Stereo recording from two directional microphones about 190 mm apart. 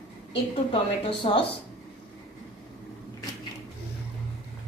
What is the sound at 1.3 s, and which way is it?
Speech, 30° left (ahead or behind).